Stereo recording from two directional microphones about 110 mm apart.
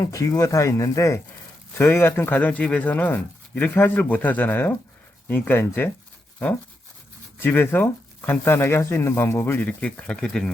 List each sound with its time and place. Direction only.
0.0 s speech: 30° left (ahead or behind)
7.3 s speech: 20° left (ahead or behind)